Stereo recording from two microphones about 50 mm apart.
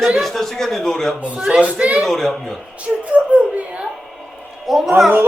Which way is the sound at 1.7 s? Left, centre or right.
Right.